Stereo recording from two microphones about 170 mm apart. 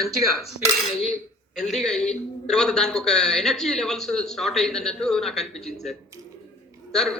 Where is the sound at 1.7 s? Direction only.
Centre (ahead or behind).